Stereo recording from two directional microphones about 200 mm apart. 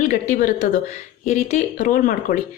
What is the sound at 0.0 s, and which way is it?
Speech, 40° left (ahead or behind).